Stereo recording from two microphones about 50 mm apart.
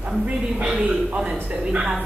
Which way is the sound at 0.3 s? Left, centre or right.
Right.